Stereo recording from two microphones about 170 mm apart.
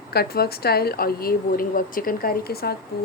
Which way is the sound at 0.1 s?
65° left (ahead or behind).